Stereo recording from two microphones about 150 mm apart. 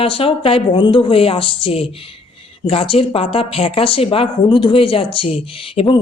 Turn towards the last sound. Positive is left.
turn(degrees=35)  # may be behind; listen again after turning